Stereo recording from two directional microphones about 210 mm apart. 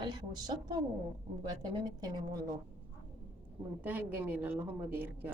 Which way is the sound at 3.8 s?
10° right (ahead or behind).